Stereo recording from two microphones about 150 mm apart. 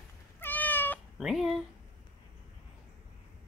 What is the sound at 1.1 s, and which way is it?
Speech, centre (ahead or behind).